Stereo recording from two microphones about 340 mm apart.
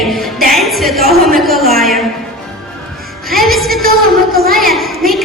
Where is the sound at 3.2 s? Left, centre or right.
Centre.